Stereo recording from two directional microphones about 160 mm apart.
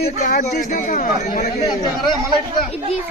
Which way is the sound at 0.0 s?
55° left (ahead or behind).